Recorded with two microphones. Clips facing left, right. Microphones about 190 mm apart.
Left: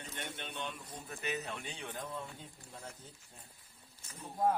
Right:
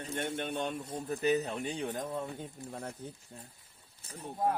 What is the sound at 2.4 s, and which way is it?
Speech, 55° right (ahead or behind).